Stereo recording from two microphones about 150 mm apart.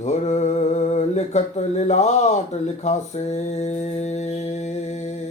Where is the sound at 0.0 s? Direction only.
50° left (ahead or behind).